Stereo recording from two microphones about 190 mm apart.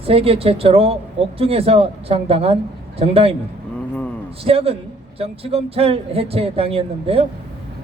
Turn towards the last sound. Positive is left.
turn(degrees=-30)  # may be behind; listen again after turning